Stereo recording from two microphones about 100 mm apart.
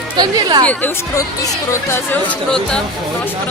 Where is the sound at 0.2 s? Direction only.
45° right (ahead or behind).